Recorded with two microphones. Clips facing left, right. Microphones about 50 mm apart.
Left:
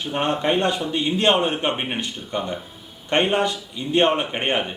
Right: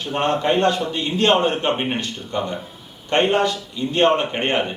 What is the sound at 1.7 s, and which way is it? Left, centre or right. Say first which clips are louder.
Speech: right 4 dB; centre.